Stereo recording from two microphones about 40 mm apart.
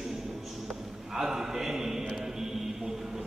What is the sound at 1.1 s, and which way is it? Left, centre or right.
Speech, centre.